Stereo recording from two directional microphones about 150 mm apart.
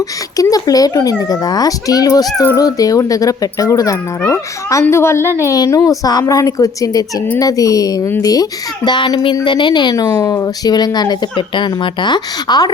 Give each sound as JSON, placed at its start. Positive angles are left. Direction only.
{"t": 0.3, "sound": "a child's voice", "side_deg": 25}